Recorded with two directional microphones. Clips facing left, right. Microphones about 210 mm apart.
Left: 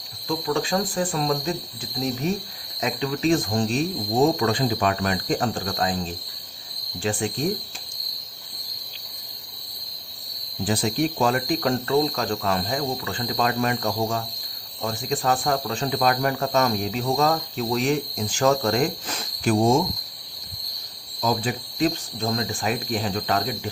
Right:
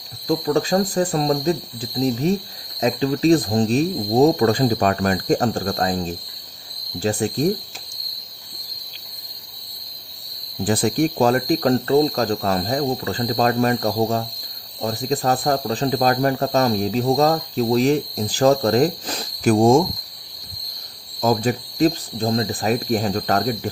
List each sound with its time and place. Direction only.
0.3 s speech: 40° right (ahead or behind)
10.7 s speech: 50° right (ahead or behind)
21.2 s speech: 45° right (ahead or behind)